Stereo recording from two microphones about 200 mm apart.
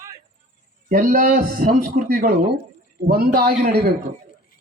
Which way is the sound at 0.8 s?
45° right (ahead or behind).